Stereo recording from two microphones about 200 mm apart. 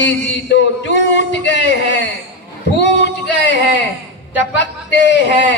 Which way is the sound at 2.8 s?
60° left (ahead or behind).